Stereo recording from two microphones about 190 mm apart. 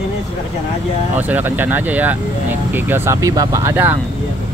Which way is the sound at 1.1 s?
10° right (ahead or behind).